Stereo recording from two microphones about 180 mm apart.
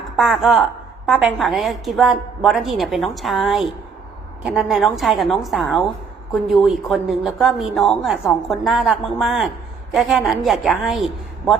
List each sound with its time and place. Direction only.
0.2 s a woman's voice: centre (ahead or behind)